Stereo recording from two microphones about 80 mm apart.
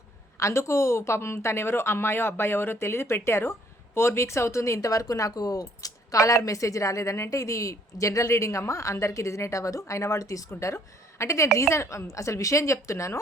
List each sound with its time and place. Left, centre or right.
0.3 s speech: left